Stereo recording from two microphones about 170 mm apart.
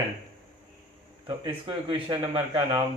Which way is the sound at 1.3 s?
30° right (ahead or behind).